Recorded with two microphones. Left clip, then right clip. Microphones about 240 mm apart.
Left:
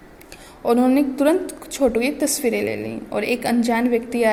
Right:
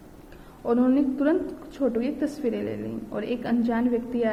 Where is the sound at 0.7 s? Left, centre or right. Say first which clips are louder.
Left 5 dB; left.